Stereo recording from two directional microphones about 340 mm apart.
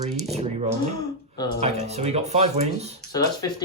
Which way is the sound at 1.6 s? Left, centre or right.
Centre.